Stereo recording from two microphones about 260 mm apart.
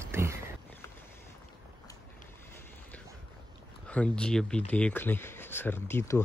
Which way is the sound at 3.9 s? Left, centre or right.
Centre.